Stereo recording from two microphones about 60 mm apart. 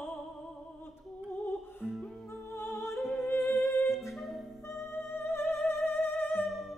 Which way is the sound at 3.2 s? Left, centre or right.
Left.